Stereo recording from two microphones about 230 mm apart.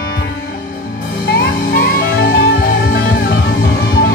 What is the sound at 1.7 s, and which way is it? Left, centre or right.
Music, left.